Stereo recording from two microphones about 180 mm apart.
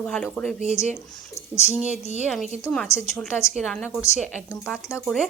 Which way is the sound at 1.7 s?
40° left (ahead or behind).